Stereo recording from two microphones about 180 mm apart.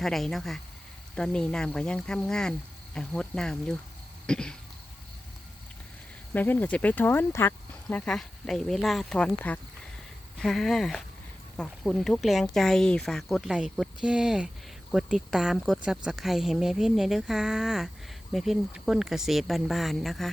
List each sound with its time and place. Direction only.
0.0 s speech: centre (ahead or behind)
4.3 s a sound: 5° left (ahead or behind)
6.3 s speech: 10° left (ahead or behind)